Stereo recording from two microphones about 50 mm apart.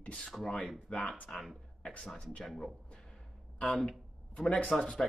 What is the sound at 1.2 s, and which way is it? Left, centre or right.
Speech, centre.